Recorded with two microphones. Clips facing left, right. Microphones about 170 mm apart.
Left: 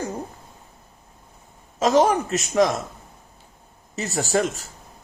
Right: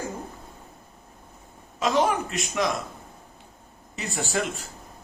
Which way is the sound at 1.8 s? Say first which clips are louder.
Left 5 dB; 40° left (ahead or behind).